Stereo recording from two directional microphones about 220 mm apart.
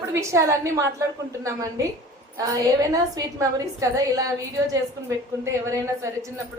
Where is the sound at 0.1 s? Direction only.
15° right (ahead or behind).